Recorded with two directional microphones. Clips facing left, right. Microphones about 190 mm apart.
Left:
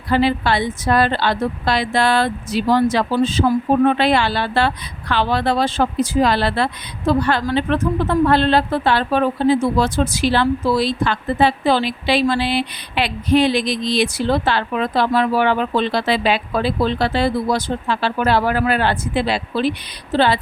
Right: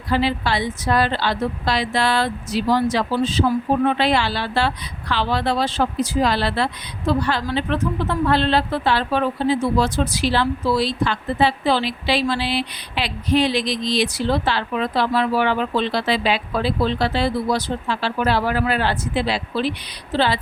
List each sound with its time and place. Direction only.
0.1 s a woman's voice: 55° left (ahead or behind)